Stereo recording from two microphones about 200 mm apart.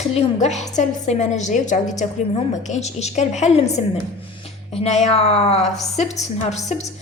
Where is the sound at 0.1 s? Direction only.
35° left (ahead or behind).